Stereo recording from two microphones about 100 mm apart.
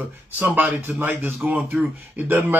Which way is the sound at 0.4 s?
20° right (ahead or behind).